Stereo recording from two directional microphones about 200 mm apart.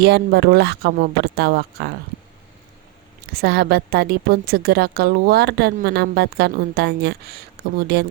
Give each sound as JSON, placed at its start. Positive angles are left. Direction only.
{"t": 0.0, "sound": "a woman's voice", "side_deg": -55}
{"t": 3.3, "sound": "a woman's voice", "side_deg": -50}